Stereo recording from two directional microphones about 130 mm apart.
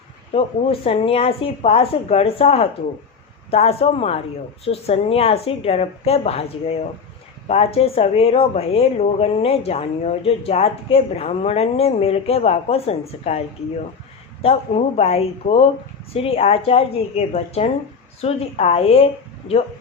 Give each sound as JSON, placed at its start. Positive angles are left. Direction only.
{"t": 0.3, "sound": "a woman's voice", "side_deg": 50}
{"t": 14.4, "sound": "a woman's voice", "side_deg": 55}